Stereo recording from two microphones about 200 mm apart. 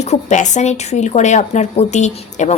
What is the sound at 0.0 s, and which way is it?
A woman's voice, 35° left (ahead or behind).